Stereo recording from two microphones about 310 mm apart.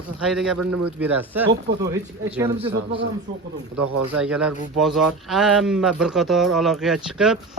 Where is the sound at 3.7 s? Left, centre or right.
Right.